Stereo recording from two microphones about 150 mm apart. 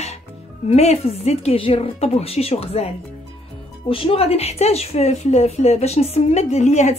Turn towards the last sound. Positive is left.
turn(degrees=50)  # may be behind; listen again after turning